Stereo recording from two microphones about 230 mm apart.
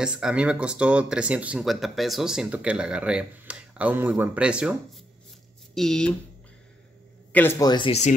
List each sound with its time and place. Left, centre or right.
0.0 s speech: centre
7.3 s speech: centre; by 8.2 s left